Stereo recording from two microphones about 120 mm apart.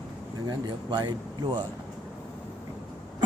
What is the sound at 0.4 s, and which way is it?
A man's voice, 35° right (ahead or behind).